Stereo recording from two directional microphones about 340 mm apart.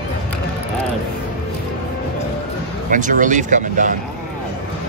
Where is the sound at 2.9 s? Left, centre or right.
Right.